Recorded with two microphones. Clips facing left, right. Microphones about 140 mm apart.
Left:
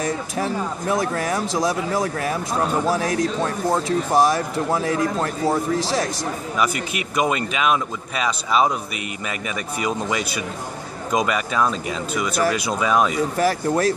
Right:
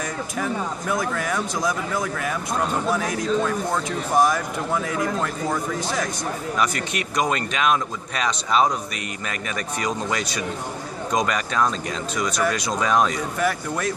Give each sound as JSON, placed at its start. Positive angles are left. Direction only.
{"t": 0.4, "sound": "speech", "side_deg": 30}
{"t": 6.6, "sound": "speech", "side_deg": 5}
{"t": 13.4, "sound": "speech", "side_deg": 35}